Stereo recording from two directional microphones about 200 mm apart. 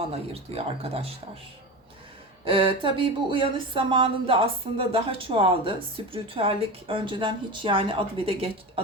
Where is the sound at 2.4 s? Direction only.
25° right (ahead or behind).